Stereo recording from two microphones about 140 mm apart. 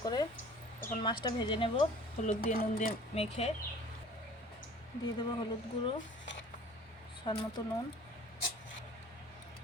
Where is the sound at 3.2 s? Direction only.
50° left (ahead or behind).